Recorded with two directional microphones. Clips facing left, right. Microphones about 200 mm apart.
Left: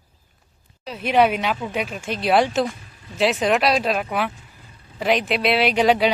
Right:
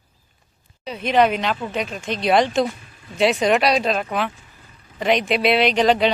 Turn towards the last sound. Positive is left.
turn(degrees=10)  # may be behind; listen again after turning